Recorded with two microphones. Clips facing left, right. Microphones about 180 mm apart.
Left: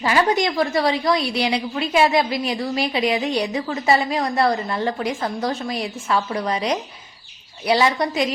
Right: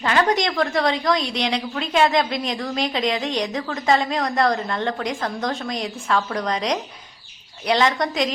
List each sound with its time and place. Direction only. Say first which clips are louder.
0.0 s a woman's voice: left 1 dB; 10° left (ahead or behind)